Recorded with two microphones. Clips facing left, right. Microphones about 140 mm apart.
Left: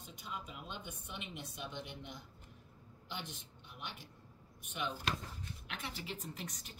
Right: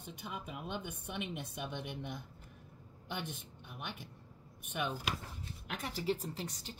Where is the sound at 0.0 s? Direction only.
60° right (ahead or behind).